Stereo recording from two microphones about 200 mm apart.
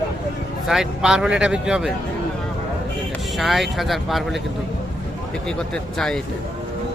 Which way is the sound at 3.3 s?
Centre (ahead or behind).